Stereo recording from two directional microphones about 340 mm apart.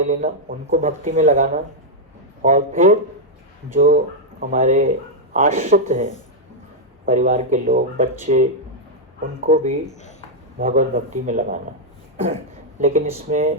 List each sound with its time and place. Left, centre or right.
0.1 s speech: right
4.4 s speech: right
9.5 s speech: right
9.9 s speech: left
10.6 s speech: right
12.1 s cough: centre
12.8 s speech: right